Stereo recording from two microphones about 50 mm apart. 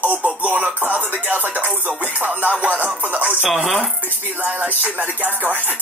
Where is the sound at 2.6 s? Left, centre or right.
Right.